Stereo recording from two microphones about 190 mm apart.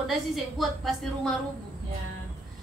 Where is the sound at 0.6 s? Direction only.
Centre (ahead or behind).